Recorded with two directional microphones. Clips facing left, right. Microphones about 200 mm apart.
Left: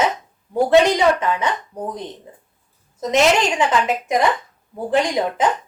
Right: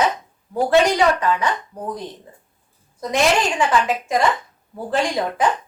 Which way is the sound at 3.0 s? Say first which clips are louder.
Left 2 dB; 20° left (ahead or behind).